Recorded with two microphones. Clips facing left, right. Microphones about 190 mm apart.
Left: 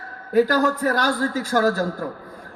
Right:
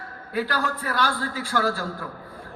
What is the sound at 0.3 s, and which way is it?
A man's voice, 45° left (ahead or behind).